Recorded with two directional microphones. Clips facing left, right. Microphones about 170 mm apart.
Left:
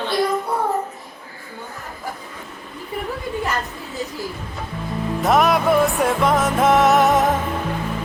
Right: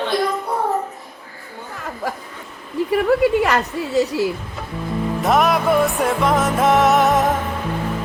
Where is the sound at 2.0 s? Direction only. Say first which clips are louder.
Right 6 dB; 90° right.